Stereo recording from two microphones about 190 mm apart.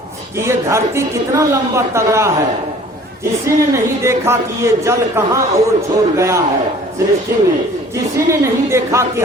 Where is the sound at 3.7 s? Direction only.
15° right (ahead or behind).